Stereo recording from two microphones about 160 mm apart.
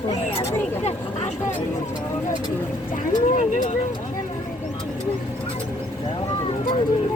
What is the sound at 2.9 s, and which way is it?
Speech, 50° left (ahead or behind).